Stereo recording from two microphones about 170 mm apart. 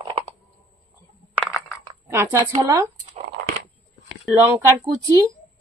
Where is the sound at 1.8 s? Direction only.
15° right (ahead or behind).